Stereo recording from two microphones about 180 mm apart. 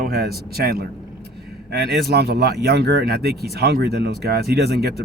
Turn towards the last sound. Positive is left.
turn(degrees=-60)  # may be behind; listen again after turning